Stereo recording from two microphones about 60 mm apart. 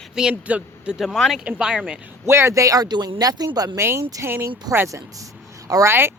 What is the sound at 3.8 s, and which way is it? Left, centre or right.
Speech, right.